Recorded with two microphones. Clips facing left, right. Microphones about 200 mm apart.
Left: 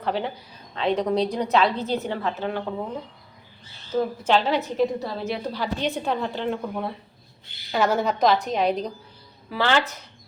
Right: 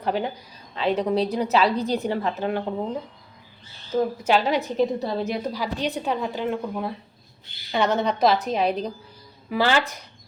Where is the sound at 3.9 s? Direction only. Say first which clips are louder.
Right 1 dB; 10° right (ahead or behind).